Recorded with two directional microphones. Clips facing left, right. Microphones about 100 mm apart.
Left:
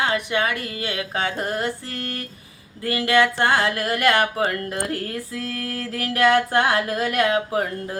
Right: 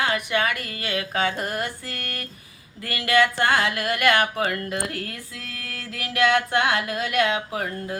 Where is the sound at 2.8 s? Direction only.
25° left (ahead or behind).